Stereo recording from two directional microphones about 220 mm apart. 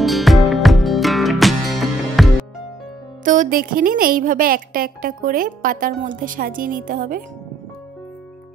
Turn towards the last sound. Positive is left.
turn(degrees=-40)  # may be behind; listen again after turning